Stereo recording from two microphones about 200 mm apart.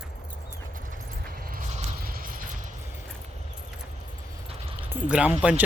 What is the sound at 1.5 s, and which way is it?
Mechanisms, 45° right (ahead or behind).